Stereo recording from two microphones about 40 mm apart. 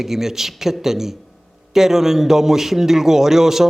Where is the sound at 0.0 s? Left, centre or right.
Centre.